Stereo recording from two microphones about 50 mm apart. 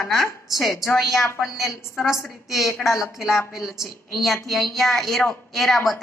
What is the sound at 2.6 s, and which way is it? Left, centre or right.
A woman's voice, left.